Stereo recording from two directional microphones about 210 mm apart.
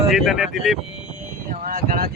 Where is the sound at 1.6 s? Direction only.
40° right (ahead or behind).